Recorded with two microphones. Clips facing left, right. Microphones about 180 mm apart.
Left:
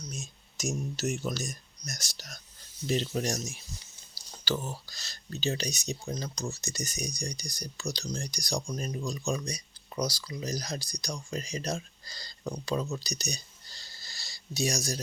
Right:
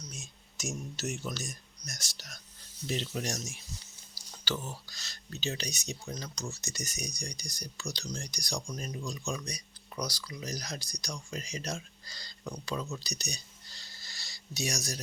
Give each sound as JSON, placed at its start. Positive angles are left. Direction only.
{"t": 0.1, "sound": "speech", "side_deg": 40}